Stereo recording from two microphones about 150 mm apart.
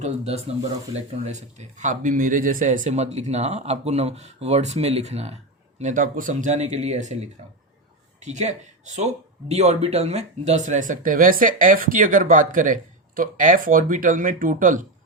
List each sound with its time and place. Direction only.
0.0 s speech: 45° right (ahead or behind)
5.8 s speech: 60° right (ahead or behind)